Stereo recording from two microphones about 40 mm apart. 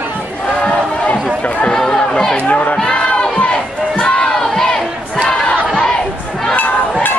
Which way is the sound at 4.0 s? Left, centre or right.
Left.